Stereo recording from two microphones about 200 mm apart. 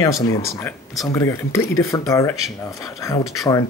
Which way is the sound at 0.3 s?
15° left (ahead or behind).